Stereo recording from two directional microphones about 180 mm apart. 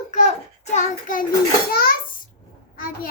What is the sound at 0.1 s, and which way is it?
Child singing, 40° left (ahead or behind).